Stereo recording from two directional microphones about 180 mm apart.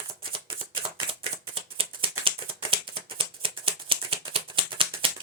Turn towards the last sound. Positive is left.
turn(degrees=-30)  # may be behind; listen again after turning